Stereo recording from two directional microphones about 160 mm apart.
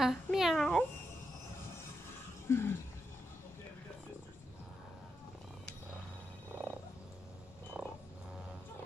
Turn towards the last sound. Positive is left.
turn(degrees=-10)  # may be behind; listen again after turning